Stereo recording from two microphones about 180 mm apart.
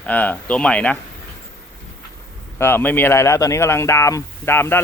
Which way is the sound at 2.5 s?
10° left (ahead or behind).